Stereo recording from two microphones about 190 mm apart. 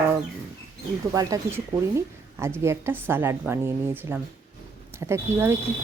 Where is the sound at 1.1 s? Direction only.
20° right (ahead or behind).